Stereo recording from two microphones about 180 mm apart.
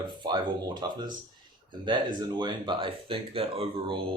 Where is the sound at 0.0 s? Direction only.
25° right (ahead or behind).